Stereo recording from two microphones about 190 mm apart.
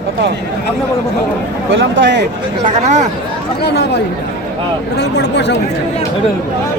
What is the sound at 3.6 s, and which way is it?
Speech, 60° left (ahead or behind).